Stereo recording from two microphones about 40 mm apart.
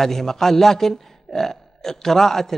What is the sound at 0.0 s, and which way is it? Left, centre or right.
A man's voice, centre.